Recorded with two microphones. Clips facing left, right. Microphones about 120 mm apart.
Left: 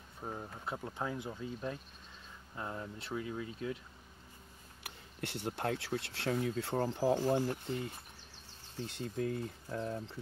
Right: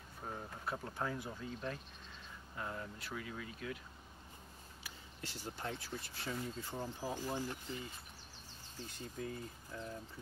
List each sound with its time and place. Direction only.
0.2 s speech: 15° left (ahead or behind)
4.8 s speech: 65° left (ahead or behind)